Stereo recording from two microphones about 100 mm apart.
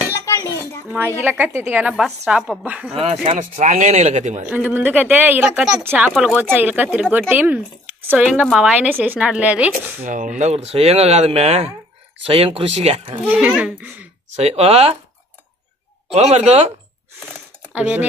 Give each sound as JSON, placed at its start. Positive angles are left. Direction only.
{"t": 0.1, "sound": "a sound", "side_deg": 30}
{"t": 0.8, "sound": "speech", "side_deg": -20}
{"t": 2.9, "sound": "speech", "side_deg": -90}
{"t": 4.5, "sound": "speech", "side_deg": -20}
{"t": 6.1, "sound": "speech", "side_deg": -5}
{"t": 6.4, "sound": "speech", "side_deg": -20}
{"t": 10.5, "sound": "speech", "side_deg": -90}
{"t": 12.3, "sound": "speech", "side_deg": -70}
{"t": 13.2, "sound": "speech", "side_deg": -10}
{"t": 14.3, "sound": "speech", "side_deg": -90}
{"t": 16.2, "sound": "speech", "side_deg": -90}
{"t": 17.7, "sound": "speech", "side_deg": -15}